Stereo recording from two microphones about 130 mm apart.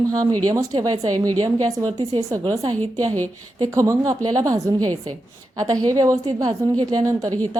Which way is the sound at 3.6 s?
25° right (ahead or behind).